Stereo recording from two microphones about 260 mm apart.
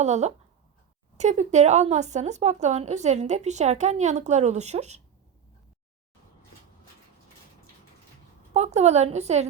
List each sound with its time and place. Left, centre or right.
0.0 s speech: right
8.5 s speech: right